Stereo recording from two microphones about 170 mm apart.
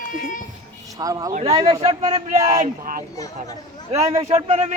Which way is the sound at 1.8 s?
40° right (ahead or behind).